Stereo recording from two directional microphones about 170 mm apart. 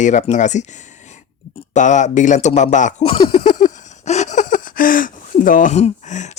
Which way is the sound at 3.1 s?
30° left (ahead or behind).